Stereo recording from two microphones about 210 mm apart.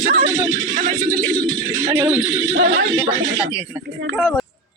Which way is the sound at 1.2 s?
15° right (ahead or behind).